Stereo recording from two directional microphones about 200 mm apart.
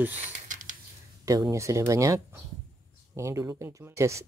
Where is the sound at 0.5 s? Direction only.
40° right (ahead or behind).